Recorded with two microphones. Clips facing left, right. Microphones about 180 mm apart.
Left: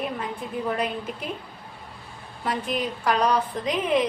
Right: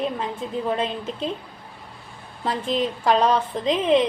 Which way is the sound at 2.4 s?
25° right (ahead or behind).